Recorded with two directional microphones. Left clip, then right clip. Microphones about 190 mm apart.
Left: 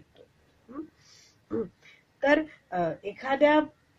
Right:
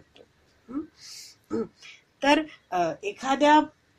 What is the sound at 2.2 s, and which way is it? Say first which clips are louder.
Speech: right 1 dB; 25° right (ahead or behind).